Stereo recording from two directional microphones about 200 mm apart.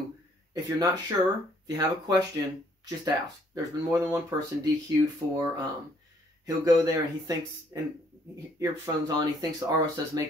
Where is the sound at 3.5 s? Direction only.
15° right (ahead or behind).